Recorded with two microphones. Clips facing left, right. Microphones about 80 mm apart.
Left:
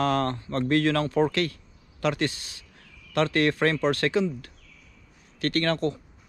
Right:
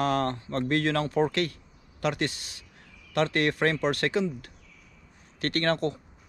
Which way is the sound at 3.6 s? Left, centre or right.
Left.